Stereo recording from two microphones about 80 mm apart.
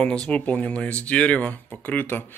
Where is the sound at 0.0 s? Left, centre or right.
Centre.